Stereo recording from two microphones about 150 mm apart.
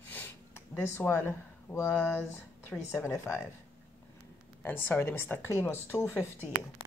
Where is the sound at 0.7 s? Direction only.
15° left (ahead or behind).